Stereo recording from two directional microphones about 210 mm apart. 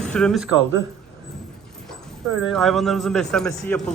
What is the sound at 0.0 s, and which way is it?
Speech, 5° left (ahead or behind).